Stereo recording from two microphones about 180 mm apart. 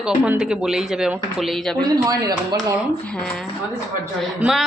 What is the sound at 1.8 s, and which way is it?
Speech, 20° right (ahead or behind).